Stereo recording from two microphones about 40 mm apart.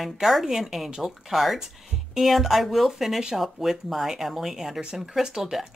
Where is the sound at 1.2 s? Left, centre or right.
Centre.